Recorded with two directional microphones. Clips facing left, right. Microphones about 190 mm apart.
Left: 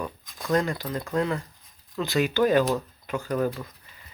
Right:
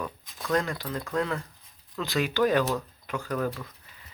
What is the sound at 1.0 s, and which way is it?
Speech, 20° left (ahead or behind).